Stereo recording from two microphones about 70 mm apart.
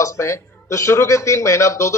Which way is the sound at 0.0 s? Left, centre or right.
Left.